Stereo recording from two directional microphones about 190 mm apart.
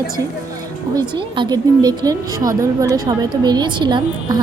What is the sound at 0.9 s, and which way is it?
A woman's voice, 25° right (ahead or behind).